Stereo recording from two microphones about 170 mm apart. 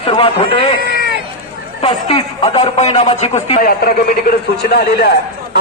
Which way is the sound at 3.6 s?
65° left (ahead or behind).